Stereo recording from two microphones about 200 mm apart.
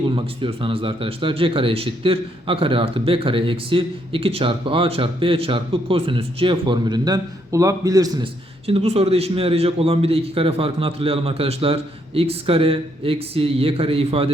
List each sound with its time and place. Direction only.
0.4 s a man's voice: 25° right (ahead or behind)